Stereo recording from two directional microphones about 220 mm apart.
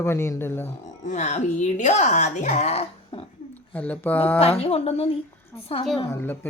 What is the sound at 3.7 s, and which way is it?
Speech, 5° left (ahead or behind).